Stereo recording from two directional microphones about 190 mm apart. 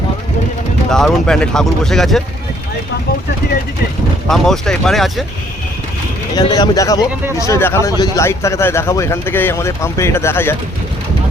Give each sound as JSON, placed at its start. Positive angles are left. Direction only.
{"t": 0.9, "sound": "speech", "side_deg": 5}
{"t": 4.3, "sound": "speech", "side_deg": 0}
{"t": 6.5, "sound": "a man's voice", "side_deg": 20}